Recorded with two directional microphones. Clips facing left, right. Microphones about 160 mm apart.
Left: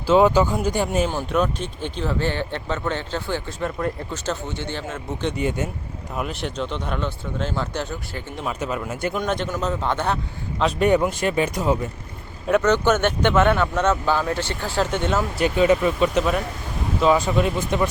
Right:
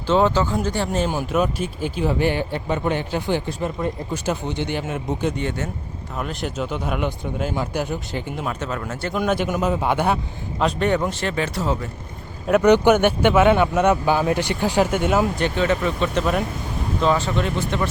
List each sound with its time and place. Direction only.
0.1 s speech: 10° left (ahead or behind)
1.1 s speech: 5° right (ahead or behind)
5.4 s speech: 15° left (ahead or behind)
6.1 s speech: centre (ahead or behind)
8.4 s speech: 5° left (ahead or behind)
9.1 s a man's voice: 5° right (ahead or behind)
10.8 s speech: 10° left (ahead or behind)
12.6 s speech: 15° right (ahead or behind)
15.4 s speech: 10° left (ahead or behind)